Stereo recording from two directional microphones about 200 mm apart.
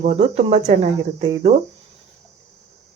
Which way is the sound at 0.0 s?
35° right (ahead or behind).